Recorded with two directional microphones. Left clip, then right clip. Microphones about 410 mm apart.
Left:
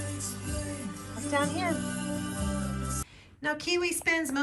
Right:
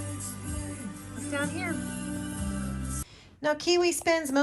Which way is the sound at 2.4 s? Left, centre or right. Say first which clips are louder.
Left 2 dB; centre.